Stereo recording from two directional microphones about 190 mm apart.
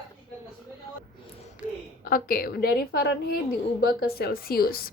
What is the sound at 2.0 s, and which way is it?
A woman's voice, 50° left (ahead or behind).